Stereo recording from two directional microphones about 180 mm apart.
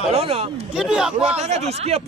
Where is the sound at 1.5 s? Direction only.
35° right (ahead or behind).